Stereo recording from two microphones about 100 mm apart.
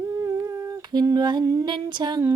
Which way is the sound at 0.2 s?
35° right (ahead or behind).